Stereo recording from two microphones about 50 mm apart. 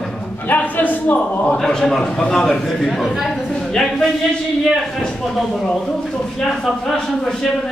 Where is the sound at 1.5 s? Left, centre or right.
Centre.